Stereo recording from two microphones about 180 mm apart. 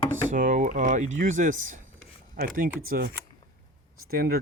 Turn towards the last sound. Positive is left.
turn(degrees=-55)  # may be behind; listen again after turning